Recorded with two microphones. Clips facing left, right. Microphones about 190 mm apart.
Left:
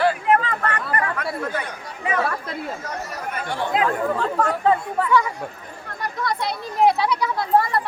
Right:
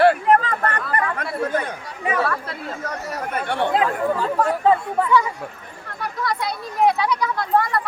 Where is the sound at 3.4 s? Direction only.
65° right (ahead or behind).